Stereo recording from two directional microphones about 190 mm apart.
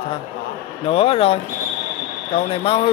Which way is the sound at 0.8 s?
30° left (ahead or behind).